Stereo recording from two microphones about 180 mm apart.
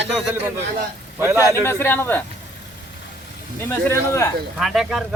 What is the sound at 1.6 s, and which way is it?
Speech, 15° left (ahead or behind).